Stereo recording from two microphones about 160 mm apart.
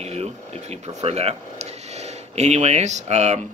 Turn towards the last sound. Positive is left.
turn(degrees=-45)  # may be behind; listen again after turning